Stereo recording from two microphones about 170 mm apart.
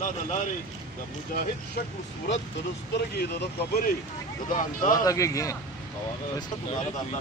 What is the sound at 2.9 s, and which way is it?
Speech, 70° left (ahead or behind).